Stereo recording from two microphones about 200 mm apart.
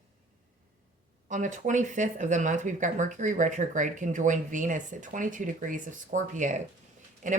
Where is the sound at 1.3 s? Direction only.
40° right (ahead or behind).